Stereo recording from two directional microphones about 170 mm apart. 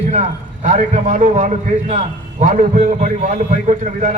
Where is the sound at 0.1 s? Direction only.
45° right (ahead or behind).